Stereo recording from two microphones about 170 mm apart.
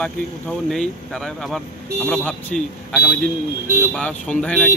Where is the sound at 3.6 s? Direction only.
15° right (ahead or behind).